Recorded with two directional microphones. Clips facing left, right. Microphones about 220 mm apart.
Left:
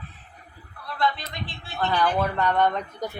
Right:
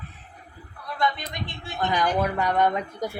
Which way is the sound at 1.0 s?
15° right (ahead or behind).